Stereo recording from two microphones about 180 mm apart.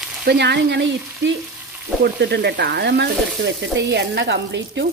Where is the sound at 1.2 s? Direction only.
90° right.